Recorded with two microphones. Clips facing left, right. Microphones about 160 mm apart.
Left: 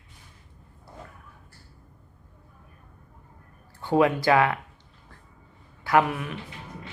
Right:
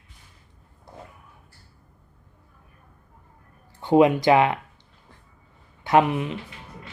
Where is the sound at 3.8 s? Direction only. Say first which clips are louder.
Right 4 dB; 20° right (ahead or behind).